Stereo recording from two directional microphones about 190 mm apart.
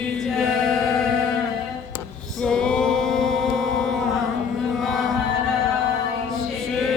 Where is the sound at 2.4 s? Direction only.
5° left (ahead or behind).